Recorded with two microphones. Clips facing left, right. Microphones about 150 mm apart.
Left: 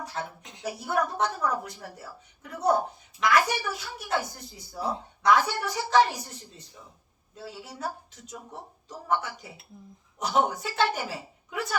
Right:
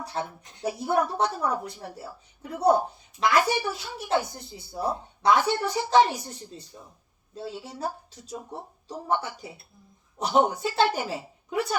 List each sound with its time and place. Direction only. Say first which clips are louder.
0.0 s a woman's voice: right 3 dB; 35° right (ahead or behind)
7.3 s a woman's voice: right 4 dB; 25° right (ahead or behind)